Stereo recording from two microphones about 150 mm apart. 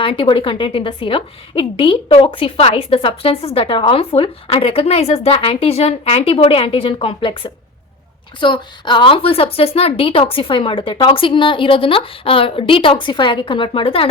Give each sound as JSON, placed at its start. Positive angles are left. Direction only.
{"t": 0.0, "sound": "a woman's voice", "side_deg": 35}